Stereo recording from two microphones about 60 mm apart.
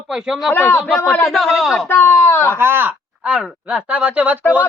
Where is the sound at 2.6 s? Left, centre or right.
Right.